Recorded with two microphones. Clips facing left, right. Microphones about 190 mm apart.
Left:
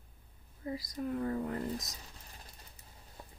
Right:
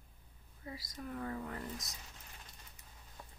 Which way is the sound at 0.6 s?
30° left (ahead or behind).